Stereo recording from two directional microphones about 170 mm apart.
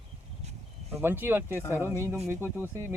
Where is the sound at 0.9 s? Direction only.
15° right (ahead or behind).